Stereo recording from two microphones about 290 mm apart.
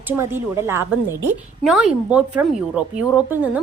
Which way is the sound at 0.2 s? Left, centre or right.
Centre.